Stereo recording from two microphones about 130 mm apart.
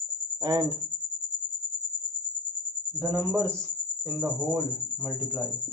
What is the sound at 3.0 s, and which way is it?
A man's voice, 25° right (ahead or behind).